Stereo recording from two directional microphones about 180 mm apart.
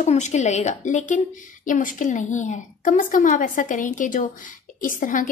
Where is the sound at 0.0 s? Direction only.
40° left (ahead or behind).